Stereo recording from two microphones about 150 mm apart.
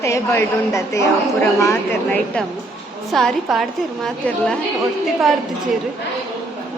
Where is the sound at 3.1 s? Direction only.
Centre (ahead or behind).